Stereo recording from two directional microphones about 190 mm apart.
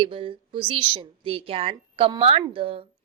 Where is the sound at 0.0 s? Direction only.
30° right (ahead or behind).